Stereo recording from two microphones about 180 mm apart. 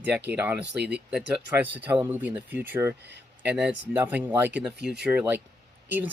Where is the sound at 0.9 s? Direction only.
5° right (ahead or behind).